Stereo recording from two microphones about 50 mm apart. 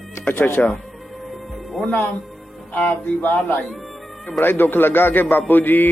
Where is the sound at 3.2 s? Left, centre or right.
Left.